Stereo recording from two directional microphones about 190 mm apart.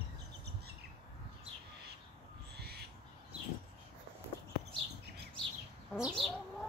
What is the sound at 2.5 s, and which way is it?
Owl, 55° right (ahead or behind).